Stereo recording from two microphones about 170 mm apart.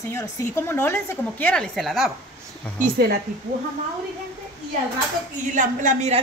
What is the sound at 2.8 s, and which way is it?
Speech, 65° right (ahead or behind).